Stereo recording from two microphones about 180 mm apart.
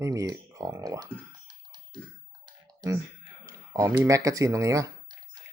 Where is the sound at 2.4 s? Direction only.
20° right (ahead or behind).